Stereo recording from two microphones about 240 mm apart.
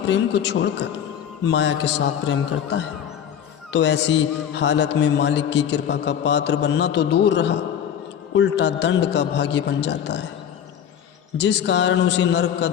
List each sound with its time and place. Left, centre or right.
0.1 s a man's voice: left
11.3 s a man's voice: left